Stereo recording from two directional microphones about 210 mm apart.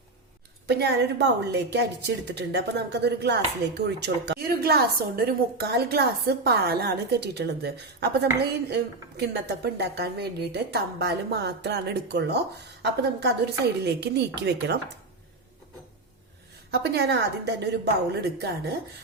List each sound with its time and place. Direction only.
0.7 s a woman's voice: 55° right (ahead or behind)
8.7 s a woman's voice: 50° right (ahead or behind)
16.7 s a woman's voice: 50° right (ahead or behind)